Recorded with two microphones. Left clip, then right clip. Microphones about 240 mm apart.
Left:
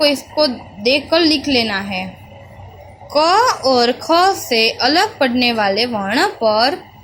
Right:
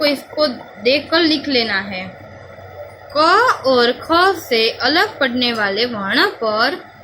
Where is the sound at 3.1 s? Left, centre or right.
Centre.